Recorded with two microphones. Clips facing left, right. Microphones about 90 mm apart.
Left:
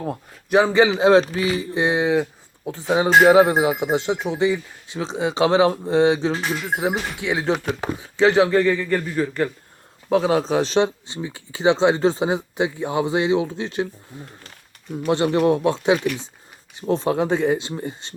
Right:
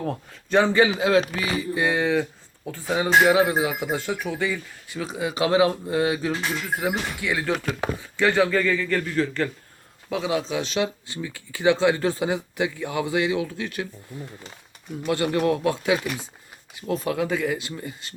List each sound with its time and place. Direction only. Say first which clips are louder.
0.0 s speech: left 1 dB; 10° left (ahead or behind)
3.2 s speech: left 6 dB; 30° left (ahead or behind); by 9.5 s 15° left (ahead or behind)
10.1 s speech: left 7 dB; 40° left (ahead or behind)